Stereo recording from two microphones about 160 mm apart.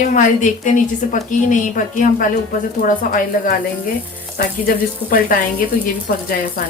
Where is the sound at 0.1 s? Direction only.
55° left (ahead or behind).